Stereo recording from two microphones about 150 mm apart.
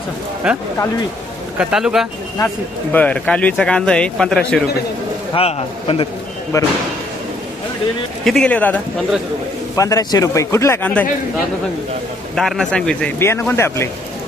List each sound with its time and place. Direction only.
0.4 s speech: 5° right (ahead or behind)
2.9 s speech: 10° left (ahead or behind)
5.3 s a man's voice: 40° left (ahead or behind)
6.5 s speech: 25° left (ahead or behind)
8.2 s speech: 5° left (ahead or behind)
9.7 s speech: 20° left (ahead or behind)
12.4 s speech: centre (ahead or behind)
13.1 s speech: 15° left (ahead or behind)